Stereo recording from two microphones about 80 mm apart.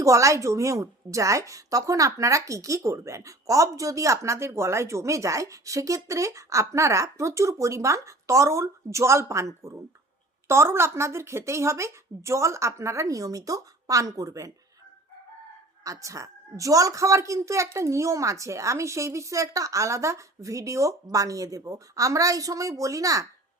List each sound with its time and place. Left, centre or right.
0.0 s a woman's voice: right
15.8 s a woman's voice: right